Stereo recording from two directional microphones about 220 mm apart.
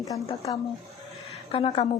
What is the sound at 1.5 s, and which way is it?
Speech, 25° left (ahead or behind).